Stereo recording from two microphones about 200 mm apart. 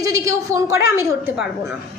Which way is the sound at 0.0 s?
15° right (ahead or behind).